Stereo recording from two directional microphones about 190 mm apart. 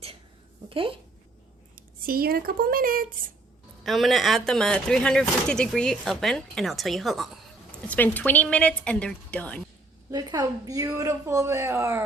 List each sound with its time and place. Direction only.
0.7 s speech: 30° right (ahead or behind)
1.7 s speech: 50° right (ahead or behind)
3.8 s a woman's voice: centre (ahead or behind)
10.1 s a woman's voice: 20° right (ahead or behind)